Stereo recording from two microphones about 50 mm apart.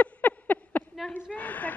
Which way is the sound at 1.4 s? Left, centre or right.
Left.